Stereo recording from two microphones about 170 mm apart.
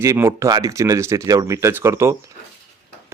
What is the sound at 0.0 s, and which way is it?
Speech, 15° right (ahead or behind).